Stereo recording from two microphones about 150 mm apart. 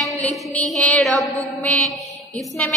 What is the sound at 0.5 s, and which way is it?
Mantra, 10° left (ahead or behind).